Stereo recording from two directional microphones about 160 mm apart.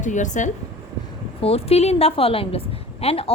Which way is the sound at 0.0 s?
50° left (ahead or behind).